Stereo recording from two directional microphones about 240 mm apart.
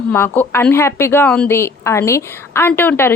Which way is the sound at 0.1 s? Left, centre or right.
Centre.